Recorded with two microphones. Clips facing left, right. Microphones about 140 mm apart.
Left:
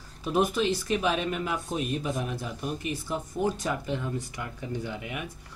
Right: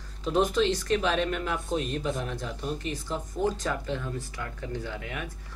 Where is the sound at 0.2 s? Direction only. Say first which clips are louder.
Right 1 dB; 10° left (ahead or behind).